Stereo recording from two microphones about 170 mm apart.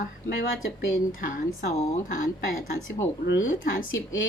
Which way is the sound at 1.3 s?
55° left (ahead or behind).